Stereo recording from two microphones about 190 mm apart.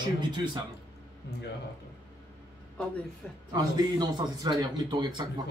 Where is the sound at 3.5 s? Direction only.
20° right (ahead or behind).